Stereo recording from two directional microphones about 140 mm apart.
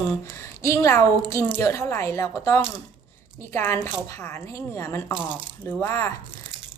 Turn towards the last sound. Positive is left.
turn(degrees=20)  # may be behind; listen again after turning